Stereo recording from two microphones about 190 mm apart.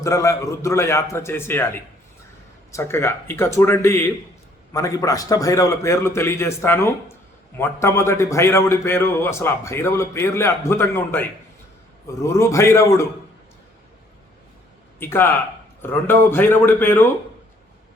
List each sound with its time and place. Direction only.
0.0 s a man's voice: 15° left (ahead or behind)
2.7 s a man's voice: 15° left (ahead or behind)
14.9 s a man's voice: 10° left (ahead or behind)